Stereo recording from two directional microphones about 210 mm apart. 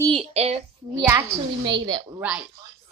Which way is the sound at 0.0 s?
25° right (ahead or behind).